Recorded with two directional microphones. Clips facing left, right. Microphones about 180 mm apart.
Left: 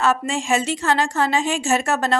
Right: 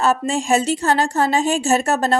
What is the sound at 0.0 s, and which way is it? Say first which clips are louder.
A woman's voice: right 2 dB; 35° right (ahead or behind).